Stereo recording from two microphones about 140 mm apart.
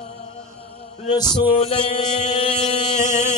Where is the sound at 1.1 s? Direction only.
30° left (ahead or behind).